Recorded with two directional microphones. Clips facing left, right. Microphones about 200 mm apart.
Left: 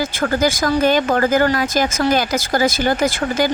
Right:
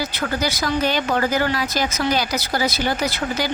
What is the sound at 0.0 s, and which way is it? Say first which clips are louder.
Speech: left 6 dB; 50° left (ahead or behind).